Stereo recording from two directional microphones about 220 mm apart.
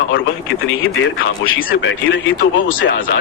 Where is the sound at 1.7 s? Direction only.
55° left (ahead or behind).